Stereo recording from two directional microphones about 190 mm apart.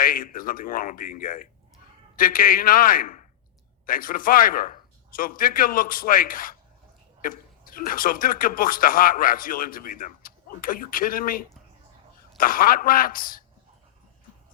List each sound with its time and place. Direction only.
0.0 s speech: 50° left (ahead or behind)